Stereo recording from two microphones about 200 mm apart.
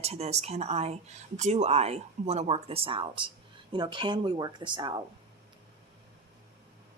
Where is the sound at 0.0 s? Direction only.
30° right (ahead or behind).